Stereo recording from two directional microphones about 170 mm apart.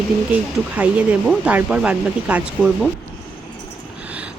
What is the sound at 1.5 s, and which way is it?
Speech, 5° right (ahead or behind).